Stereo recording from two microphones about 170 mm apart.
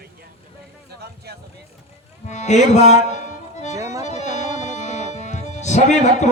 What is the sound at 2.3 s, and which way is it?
Music, 45° left (ahead or behind).